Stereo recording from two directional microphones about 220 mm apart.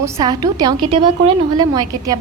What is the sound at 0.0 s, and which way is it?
A woman's voice, 15° right (ahead or behind).